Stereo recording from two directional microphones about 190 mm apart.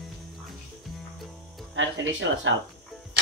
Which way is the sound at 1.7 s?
85° right.